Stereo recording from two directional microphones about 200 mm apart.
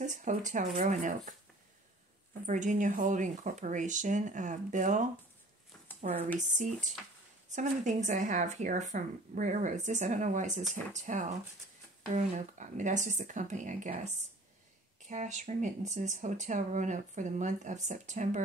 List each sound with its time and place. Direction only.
0.0 s speech: 40° right (ahead or behind)
2.4 s speech: 40° right (ahead or behind)